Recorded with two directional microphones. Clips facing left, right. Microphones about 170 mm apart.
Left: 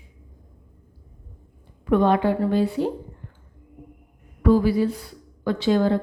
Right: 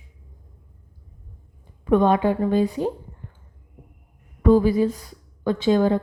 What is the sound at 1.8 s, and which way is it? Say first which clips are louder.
Speech: right 1 dB; 20° right (ahead or behind).